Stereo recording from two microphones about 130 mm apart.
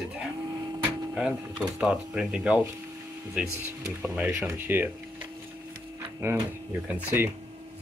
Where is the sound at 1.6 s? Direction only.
5° right (ahead or behind).